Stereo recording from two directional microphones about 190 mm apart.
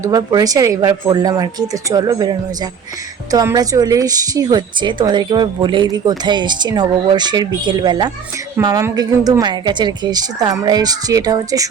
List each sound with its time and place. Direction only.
0.0 s a woman's voice: 20° right (ahead or behind)
3.3 s a woman's voice: 20° right (ahead or behind)